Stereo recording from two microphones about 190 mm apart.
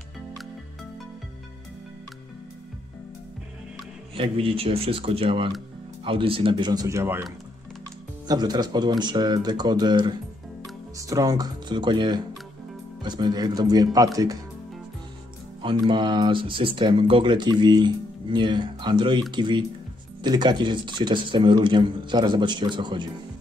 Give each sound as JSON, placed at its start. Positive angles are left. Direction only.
{"t": 4.1, "sound": "speech", "side_deg": -30}
{"t": 8.3, "sound": "speech", "side_deg": -20}
{"t": 15.6, "sound": "speech", "side_deg": -25}